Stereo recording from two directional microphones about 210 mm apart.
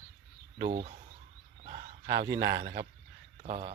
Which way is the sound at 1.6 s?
30° right (ahead or behind).